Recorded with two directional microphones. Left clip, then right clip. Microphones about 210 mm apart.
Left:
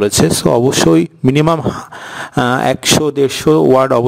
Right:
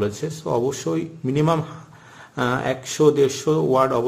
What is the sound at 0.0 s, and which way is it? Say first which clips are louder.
Speech: left 13 dB; 50° left (ahead or behind).